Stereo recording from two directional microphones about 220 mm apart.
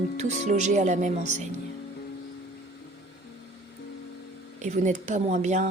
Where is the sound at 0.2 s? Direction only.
30° right (ahead or behind).